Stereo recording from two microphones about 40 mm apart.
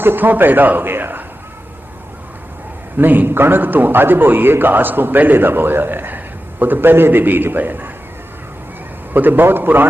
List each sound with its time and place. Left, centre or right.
0.0 s a man's voice: right
3.0 s a man's voice: right
3.2 s a man's voice: right
9.1 s a man's voice: right